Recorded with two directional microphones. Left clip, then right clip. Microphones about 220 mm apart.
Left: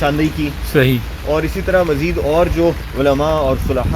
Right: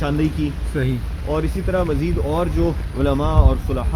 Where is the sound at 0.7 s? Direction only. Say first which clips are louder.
Left 12 dB; 50° left (ahead or behind).